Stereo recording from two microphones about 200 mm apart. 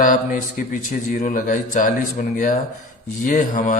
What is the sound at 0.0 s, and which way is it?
A man's voice, 45° left (ahead or behind).